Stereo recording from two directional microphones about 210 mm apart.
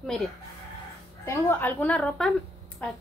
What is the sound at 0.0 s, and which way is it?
Chicken, centre (ahead or behind).